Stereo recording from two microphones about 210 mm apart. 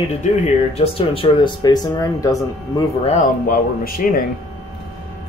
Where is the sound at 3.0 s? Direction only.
35° left (ahead or behind).